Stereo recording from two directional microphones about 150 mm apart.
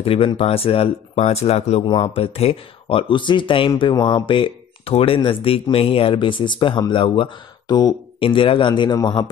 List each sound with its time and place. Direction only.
0.0 s speech: 35° left (ahead or behind)